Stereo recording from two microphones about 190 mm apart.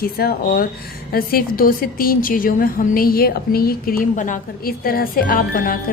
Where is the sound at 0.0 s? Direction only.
55° left (ahead or behind).